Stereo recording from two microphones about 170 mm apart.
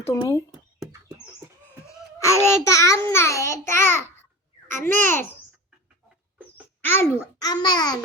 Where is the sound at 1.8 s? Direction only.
15° left (ahead or behind).